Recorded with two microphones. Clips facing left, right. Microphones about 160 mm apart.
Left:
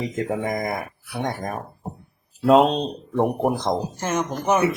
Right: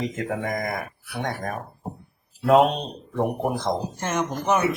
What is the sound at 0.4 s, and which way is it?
Speech, 25° left (ahead or behind).